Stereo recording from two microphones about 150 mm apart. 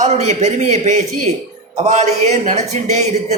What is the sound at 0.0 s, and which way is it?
Speech, 50° right (ahead or behind).